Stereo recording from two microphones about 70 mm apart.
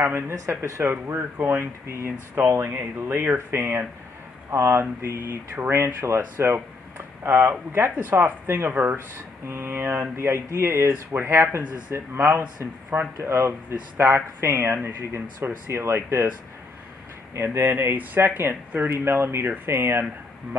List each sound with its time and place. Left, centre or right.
0.3 s speech: right
2.0 s speech: right
17.3 s speech: right